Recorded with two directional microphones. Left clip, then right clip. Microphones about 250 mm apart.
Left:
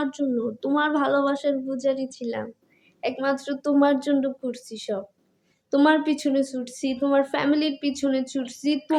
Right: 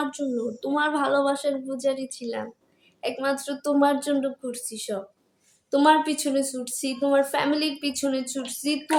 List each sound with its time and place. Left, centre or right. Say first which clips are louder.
0.0 s a woman's voice: left 2 dB; centre